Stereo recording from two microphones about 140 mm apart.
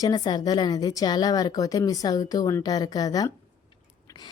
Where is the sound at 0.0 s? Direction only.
30° left (ahead or behind).